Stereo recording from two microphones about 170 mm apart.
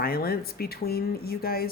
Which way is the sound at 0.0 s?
60° left (ahead or behind).